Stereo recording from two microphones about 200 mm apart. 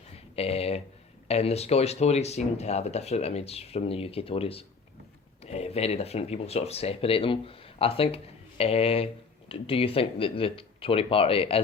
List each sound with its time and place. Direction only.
0.3 s speech: 30° left (ahead or behind)